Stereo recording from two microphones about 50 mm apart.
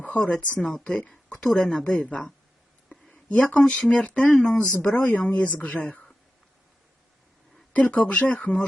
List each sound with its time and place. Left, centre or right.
0.0 s speech: left
0.9 s speech: centre
1.9 s speech: left
3.1 s a sound: left
3.6 s speech: centre
7.7 s speech: left